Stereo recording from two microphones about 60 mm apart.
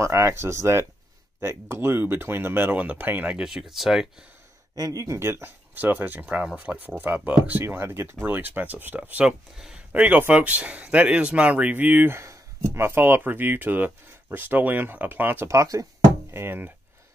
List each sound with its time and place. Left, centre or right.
0.0 s speech: right
2.7 s speech: right
3.3 s speech: centre
4.7 s speech: right
5.0 s speech: right
5.8 s speech: right
6.3 s speech: right
7.6 s speech: right
8.3 s speech: right
9.2 s speech: centre
9.9 s speech: right
12.1 s speech: right
15.5 s speech: right
16.3 s speech: right